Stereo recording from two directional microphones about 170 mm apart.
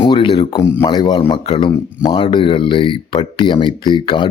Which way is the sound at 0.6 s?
20° left (ahead or behind).